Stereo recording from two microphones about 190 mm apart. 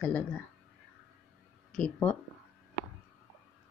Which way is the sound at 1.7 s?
5° left (ahead or behind).